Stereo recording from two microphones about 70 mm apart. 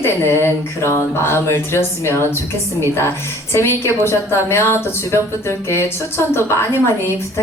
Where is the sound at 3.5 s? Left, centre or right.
Left.